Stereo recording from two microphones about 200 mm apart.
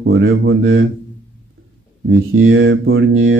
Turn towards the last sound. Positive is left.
turn(degrees=-80)